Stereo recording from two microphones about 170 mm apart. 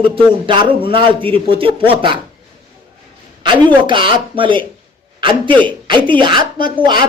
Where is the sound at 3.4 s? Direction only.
30° right (ahead or behind).